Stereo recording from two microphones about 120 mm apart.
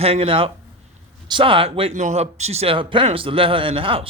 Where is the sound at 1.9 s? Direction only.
75° right (ahead or behind); by 4.0 s 50° right (ahead or behind).